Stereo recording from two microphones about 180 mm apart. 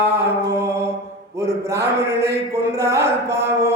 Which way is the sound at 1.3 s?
15° right (ahead or behind).